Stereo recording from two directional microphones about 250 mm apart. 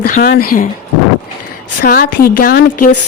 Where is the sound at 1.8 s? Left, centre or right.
Left.